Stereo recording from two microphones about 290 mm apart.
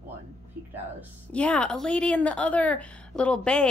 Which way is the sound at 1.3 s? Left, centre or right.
Centre.